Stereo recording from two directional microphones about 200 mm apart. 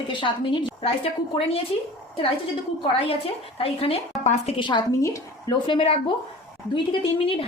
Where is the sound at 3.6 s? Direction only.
30° left (ahead or behind).